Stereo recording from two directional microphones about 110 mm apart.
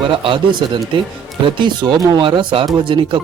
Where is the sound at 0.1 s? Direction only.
50° right (ahead or behind).